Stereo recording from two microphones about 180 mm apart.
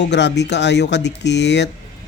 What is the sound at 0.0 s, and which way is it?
Speech, 75° left (ahead or behind).